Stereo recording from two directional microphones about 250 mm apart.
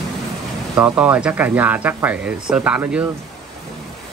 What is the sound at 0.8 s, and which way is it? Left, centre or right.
Speech, centre.